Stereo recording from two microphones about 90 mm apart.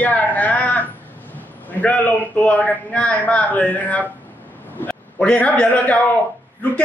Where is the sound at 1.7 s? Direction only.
15° left (ahead or behind).